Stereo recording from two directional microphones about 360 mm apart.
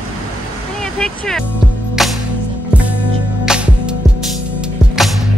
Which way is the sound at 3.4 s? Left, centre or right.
Centre.